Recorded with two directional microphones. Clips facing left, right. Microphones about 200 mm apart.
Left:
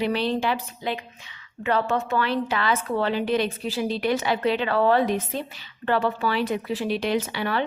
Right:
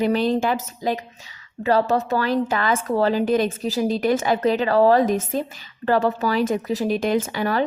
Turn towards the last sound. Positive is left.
turn(degrees=-40)  # may be behind; listen again after turning